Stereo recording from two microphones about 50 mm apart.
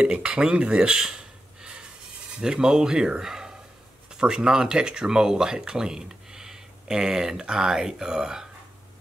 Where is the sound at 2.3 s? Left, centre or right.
Centre.